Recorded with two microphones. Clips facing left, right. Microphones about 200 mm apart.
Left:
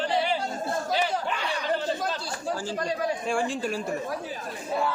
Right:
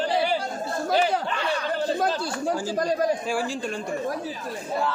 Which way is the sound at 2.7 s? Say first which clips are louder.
Right 6 dB; 40° right (ahead or behind).